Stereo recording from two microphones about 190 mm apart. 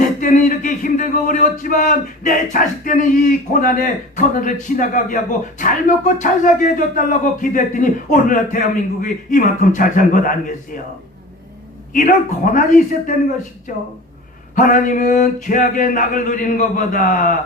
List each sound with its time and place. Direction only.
0.2 s speech: 45° left (ahead or behind)
11.9 s speech: 45° left (ahead or behind)
14.5 s speech: 45° left (ahead or behind)